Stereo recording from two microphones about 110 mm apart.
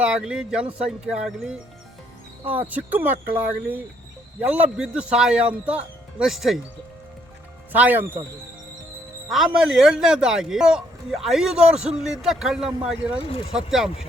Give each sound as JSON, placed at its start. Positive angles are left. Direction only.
{"t": 0.0, "sound": "speech", "side_deg": -10}
{"t": 7.7, "sound": "speech", "side_deg": -15}
{"t": 9.3, "sound": "a man's voice", "side_deg": 0}